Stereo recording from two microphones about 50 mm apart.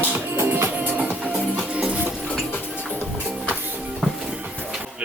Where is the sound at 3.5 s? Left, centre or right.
Right.